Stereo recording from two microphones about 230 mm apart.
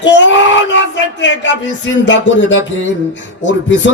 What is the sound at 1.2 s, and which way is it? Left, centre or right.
Speech, left.